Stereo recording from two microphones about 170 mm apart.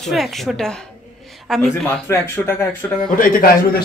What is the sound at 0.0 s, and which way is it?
A woman's voice, centre (ahead or behind).